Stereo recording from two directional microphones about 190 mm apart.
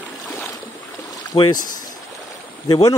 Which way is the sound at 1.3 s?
25° left (ahead or behind).